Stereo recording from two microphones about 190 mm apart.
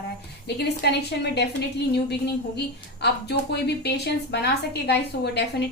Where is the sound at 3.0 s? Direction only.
60° left (ahead or behind).